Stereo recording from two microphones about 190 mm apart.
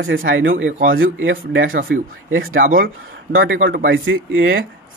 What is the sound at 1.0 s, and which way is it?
Speech, 90° right.